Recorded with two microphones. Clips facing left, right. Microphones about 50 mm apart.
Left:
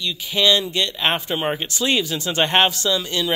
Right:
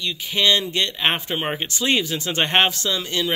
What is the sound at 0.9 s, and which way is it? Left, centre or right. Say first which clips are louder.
Speech: left 1 dB; right.